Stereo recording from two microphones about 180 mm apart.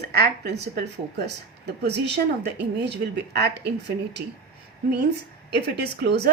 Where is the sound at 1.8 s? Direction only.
70° right (ahead or behind).